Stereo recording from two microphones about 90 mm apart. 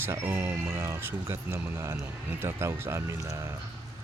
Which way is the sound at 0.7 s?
30° right (ahead or behind).